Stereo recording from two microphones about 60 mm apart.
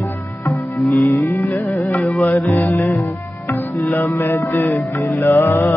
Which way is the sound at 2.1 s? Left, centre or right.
Centre.